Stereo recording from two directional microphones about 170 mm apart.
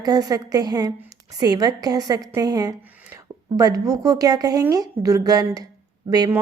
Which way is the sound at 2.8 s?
10° right (ahead or behind).